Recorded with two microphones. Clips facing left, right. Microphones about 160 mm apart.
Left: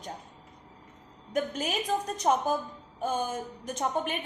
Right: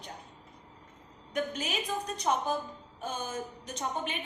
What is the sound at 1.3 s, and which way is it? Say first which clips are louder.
A woman's voice: left 3 dB; 45° left (ahead or behind).